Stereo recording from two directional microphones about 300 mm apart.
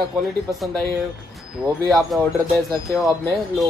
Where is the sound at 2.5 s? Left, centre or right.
Centre.